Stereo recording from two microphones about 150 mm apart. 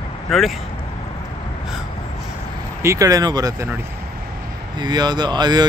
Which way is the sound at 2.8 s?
20° right (ahead or behind).